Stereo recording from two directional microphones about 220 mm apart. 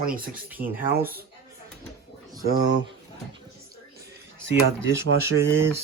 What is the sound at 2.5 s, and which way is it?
Speech, 50° right (ahead or behind).